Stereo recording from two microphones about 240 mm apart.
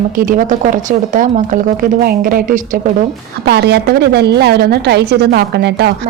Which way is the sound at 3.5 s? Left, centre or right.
Right.